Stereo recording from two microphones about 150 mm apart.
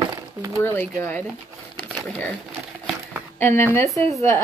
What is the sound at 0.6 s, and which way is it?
Speech, 15° left (ahead or behind).